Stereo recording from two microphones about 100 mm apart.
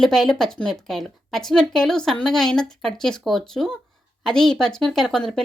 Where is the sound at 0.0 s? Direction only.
5° left (ahead or behind).